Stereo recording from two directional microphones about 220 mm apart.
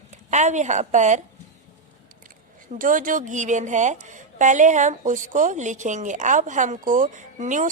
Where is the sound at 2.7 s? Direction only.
35° right (ahead or behind).